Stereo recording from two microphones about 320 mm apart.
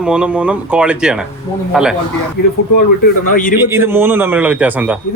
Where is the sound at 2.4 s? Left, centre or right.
Left.